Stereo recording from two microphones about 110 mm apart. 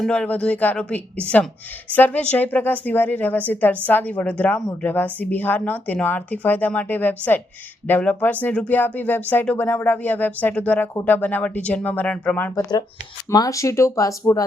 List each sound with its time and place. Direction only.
0.0 s a woman's voice: 10° left (ahead or behind)
13.3 s speech: 30° left (ahead or behind)